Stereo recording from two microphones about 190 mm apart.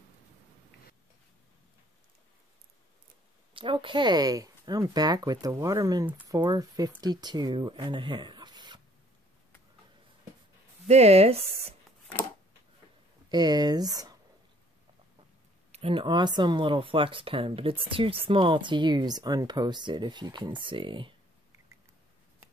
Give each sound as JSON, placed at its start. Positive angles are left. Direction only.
{"t": 3.5, "sound": "speech", "side_deg": -25}
{"t": 10.9, "sound": "speech", "side_deg": -35}
{"t": 13.3, "sound": "speech", "side_deg": -20}
{"t": 15.7, "sound": "speech", "side_deg": -30}